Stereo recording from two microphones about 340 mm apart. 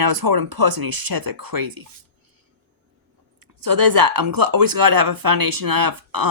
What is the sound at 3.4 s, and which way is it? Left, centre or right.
Speech, right.